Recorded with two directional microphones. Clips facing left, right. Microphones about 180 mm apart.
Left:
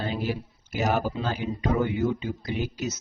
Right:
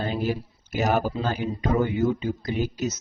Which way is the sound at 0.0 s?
45° right (ahead or behind).